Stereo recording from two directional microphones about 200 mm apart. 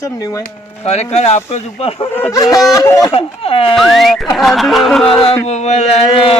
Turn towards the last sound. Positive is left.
turn(degrees=30)  # may be behind; listen again after turning